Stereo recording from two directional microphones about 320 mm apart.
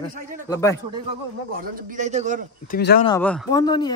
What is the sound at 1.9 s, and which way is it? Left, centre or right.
Speech, right.